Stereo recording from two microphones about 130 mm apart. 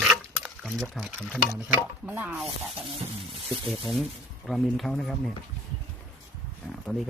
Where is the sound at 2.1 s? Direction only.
10° right (ahead or behind).